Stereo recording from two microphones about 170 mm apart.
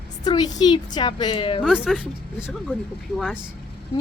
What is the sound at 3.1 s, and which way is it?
Speech, centre (ahead or behind).